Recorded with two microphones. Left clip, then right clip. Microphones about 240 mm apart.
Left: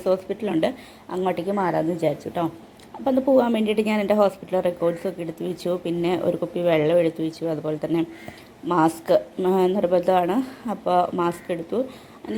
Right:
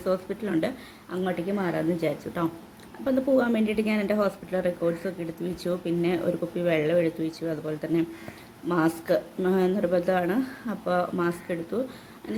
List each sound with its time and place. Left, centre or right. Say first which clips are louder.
0.0 s a woman's voice: left 5 dB; centre